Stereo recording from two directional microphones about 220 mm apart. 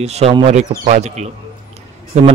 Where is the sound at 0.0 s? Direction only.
30° right (ahead or behind).